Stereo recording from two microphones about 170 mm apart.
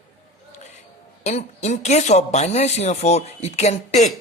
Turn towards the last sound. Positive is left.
turn(degrees=40)  # may be behind; listen again after turning